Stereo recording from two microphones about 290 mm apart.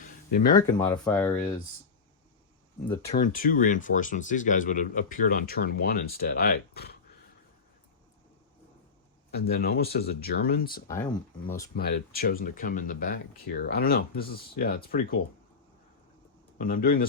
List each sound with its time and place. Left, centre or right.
0.0 s a sound: left
0.7 s speech: centre
3.0 s speech: left
9.3 s speech: left
10.8 s speech: centre
11.8 s speech: left
16.6 s speech: left